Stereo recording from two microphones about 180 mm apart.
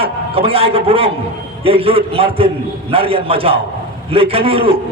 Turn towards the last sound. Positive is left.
turn(degrees=-30)  # may be behind; listen again after turning